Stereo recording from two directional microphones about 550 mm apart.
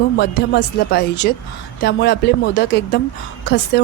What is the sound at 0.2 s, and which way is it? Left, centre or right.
Speech, centre.